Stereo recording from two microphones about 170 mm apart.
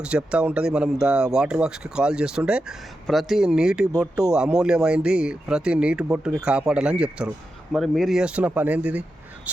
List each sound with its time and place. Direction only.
0.0 s speech: 5° right (ahead or behind)